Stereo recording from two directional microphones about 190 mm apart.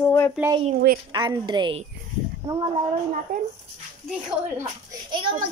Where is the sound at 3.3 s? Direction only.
50° right (ahead or behind).